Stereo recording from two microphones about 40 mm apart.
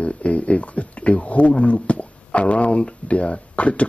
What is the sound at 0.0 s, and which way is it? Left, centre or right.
Speech, left.